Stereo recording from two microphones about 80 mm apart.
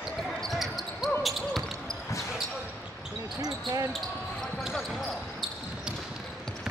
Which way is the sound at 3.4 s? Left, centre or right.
Right.